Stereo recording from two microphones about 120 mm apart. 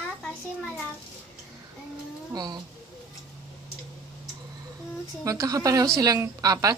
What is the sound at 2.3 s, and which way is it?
Speech, 35° right (ahead or behind).